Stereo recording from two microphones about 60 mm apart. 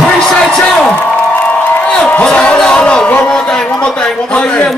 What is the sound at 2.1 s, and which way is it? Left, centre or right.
A man's voice, left.